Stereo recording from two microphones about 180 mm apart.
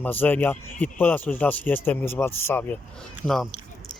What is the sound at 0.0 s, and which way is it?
Speech, 10° left (ahead or behind).